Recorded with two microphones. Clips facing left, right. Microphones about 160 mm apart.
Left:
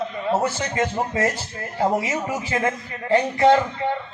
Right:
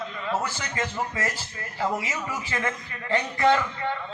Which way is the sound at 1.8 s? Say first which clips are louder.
Left 6 dB; 40° left (ahead or behind).